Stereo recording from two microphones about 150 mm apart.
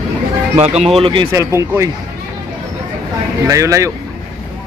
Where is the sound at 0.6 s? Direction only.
45° right (ahead or behind).